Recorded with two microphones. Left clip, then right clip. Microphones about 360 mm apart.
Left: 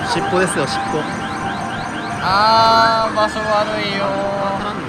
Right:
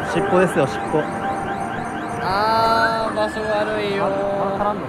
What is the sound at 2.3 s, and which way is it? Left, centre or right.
Music, left.